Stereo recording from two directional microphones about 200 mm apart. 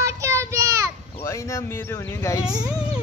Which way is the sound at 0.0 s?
15° right (ahead or behind).